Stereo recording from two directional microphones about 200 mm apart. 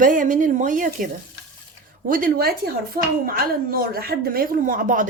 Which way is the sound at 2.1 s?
45° right (ahead or behind).